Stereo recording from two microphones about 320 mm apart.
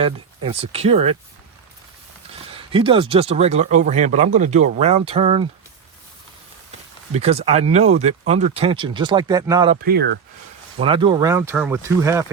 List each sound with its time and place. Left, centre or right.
0.0 s speech: centre
2.5 s speech: centre
6.7 s speech: centre
9.8 s speech: right
10.8 s speech: centre